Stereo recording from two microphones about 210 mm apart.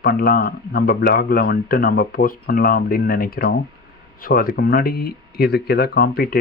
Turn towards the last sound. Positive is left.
turn(degrees=45)  # may be behind; listen again after turning